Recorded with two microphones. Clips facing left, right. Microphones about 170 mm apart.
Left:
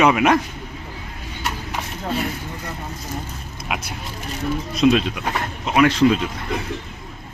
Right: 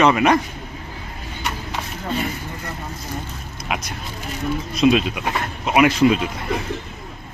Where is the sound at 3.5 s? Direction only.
Centre (ahead or behind).